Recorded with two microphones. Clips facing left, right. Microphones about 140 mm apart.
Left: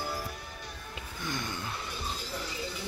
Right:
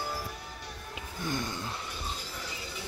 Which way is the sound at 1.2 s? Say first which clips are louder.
Right 3 dB; 40° right (ahead or behind).